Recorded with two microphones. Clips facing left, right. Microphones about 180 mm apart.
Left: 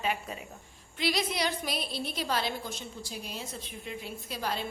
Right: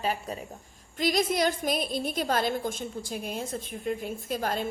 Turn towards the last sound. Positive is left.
turn(degrees=-50)  # may be behind; listen again after turning